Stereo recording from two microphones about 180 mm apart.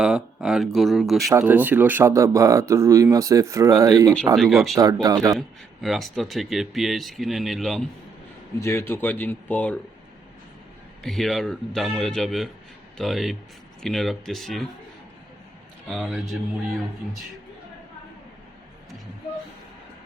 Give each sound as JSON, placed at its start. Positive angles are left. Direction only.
{"t": 0.0, "sound": "speech", "side_deg": -5}
{"t": 4.4, "sound": "speech", "side_deg": 0}
{"t": 4.8, "sound": "speech", "side_deg": -20}
{"t": 5.4, "sound": "speech", "side_deg": 0}
{"t": 8.6, "sound": "speech", "side_deg": 15}
{"t": 11.0, "sound": "speech", "side_deg": 0}
{"t": 15.9, "sound": "speech", "side_deg": 0}